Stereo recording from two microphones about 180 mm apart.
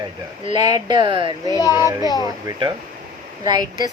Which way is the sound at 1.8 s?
15° right (ahead or behind).